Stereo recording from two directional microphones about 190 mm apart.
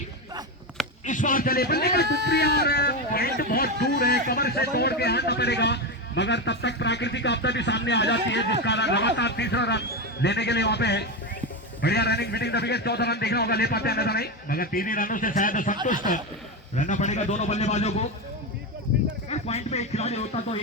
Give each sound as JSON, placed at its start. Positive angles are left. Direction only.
{"t": 1.0, "sound": "a man's voice", "side_deg": 45}
{"t": 19.3, "sound": "speech", "side_deg": 35}